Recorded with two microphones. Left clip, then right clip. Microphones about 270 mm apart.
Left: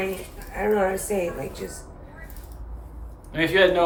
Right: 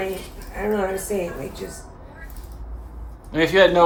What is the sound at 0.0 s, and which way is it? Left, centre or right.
A woman's voice, centre.